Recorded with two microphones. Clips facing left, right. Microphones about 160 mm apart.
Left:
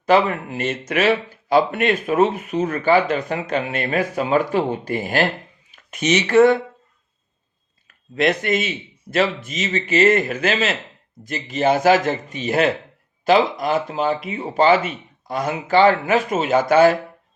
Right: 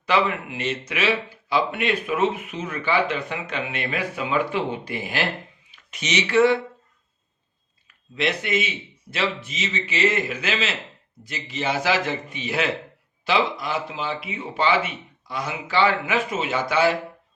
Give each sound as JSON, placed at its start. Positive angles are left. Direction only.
{"t": 0.0, "sound": "speech", "side_deg": 40}
{"t": 8.1, "sound": "speech", "side_deg": 45}